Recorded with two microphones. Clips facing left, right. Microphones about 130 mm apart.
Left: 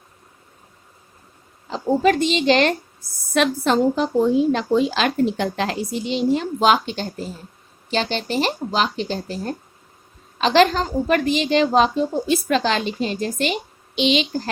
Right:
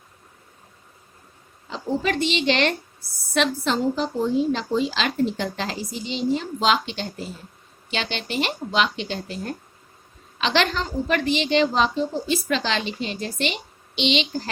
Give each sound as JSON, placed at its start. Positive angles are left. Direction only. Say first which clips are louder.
{"t": 1.7, "sound": "speech", "louder": "left 7 dB", "side_deg": 45}
{"t": 3.3, "sound": "a woman's voice", "louder": "left 4 dB", "side_deg": 50}